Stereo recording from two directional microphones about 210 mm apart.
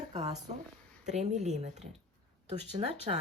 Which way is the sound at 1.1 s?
35° right (ahead or behind).